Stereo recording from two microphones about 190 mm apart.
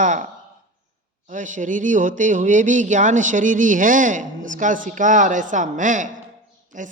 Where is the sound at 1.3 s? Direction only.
40° right (ahead or behind).